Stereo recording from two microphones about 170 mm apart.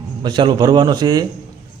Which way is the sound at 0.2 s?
25° right (ahead or behind).